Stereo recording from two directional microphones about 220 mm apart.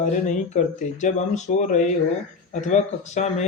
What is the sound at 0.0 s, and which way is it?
Speech, 35° left (ahead or behind).